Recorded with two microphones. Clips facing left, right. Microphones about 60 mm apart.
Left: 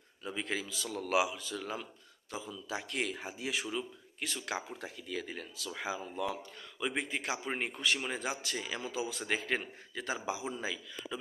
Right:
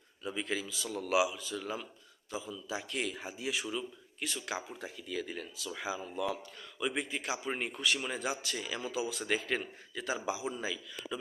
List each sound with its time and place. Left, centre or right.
0.3 s speech: left